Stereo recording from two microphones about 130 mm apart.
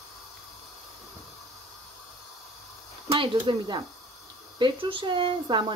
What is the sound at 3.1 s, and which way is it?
Speech, 40° right (ahead or behind).